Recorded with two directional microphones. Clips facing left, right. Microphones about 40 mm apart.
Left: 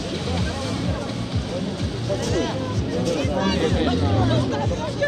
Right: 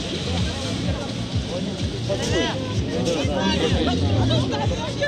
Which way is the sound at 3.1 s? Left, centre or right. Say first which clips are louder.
Even; right.